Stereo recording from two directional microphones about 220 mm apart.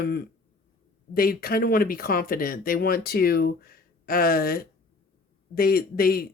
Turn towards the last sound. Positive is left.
turn(degrees=45)  # may be behind; listen again after turning